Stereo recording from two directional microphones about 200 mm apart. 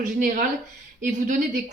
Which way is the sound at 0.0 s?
40° right (ahead or behind).